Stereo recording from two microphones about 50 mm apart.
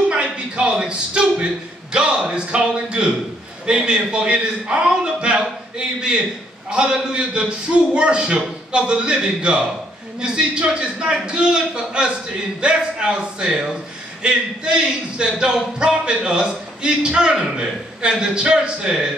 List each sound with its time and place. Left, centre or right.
0.1 s a man's voice: right